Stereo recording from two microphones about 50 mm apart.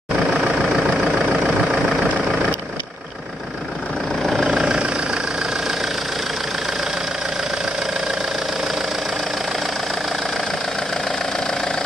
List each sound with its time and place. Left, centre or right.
0.4 s vehicle: centre
4.2 s engine: centre